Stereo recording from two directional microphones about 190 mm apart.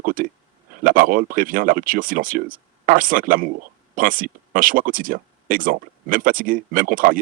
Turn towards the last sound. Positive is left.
turn(degrees=-45)  # may be behind; listen again after turning